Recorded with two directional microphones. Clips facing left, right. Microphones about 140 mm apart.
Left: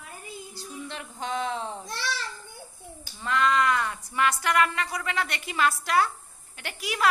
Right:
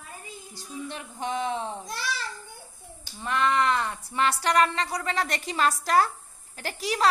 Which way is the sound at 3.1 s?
20° right (ahead or behind).